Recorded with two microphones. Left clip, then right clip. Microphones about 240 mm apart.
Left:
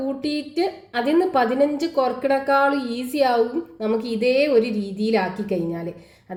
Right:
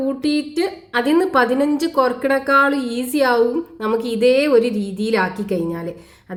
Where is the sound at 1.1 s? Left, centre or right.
Right.